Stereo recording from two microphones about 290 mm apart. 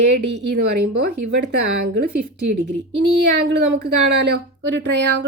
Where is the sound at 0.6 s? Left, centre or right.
Right.